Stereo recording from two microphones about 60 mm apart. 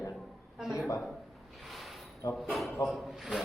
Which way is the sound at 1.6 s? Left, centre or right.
Centre.